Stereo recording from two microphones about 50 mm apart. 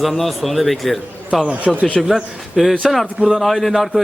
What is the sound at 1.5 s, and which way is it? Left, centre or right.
Speech, right.